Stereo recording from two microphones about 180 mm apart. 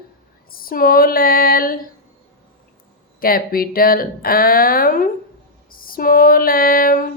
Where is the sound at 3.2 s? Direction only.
55° left (ahead or behind).